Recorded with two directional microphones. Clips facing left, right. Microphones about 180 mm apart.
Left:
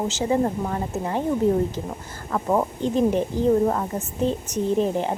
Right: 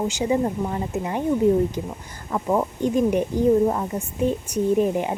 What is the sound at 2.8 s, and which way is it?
Speech, 15° right (ahead or behind).